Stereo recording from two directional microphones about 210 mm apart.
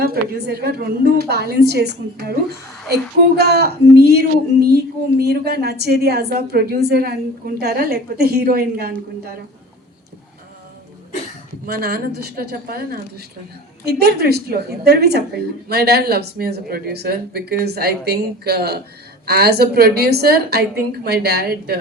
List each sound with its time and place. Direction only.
0.0 s a woman's voice: 45° right (ahead or behind)
11.6 s a woman's voice: 50° right (ahead or behind)